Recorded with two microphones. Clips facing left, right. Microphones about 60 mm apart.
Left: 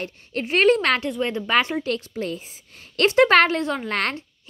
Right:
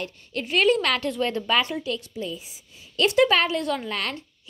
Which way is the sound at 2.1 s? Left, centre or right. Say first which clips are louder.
Left 4 dB; left.